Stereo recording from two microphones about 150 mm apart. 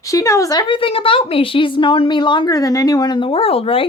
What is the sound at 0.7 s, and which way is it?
Speech, 35° left (ahead or behind).